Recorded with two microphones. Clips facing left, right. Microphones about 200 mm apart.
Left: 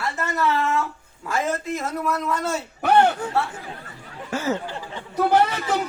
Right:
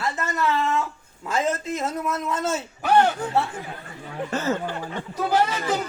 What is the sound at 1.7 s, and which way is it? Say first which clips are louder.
Speech: left 1 dB; 20° right (ahead or behind).